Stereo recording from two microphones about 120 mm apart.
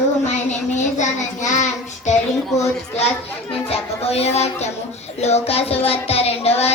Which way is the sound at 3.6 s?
60° left (ahead or behind).